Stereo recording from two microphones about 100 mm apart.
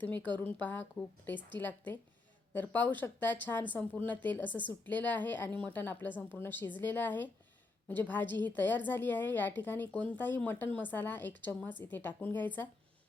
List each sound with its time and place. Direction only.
0.3 s a woman's voice: 15° left (ahead or behind)